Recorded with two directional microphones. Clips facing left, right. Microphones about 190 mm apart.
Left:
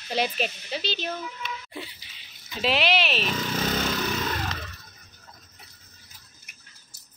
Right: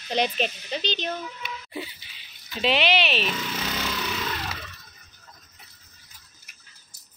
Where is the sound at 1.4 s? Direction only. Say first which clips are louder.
Right 1 dB; 5° right (ahead or behind).